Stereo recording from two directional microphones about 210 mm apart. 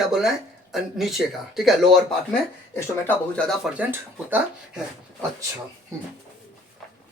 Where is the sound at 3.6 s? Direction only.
5° right (ahead or behind).